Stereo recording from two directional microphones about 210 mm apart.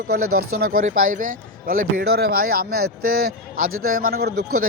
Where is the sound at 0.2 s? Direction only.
90° right.